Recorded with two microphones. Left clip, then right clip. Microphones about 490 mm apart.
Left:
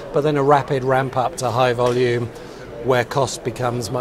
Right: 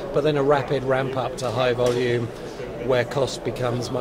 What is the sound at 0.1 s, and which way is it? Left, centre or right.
Speech, left.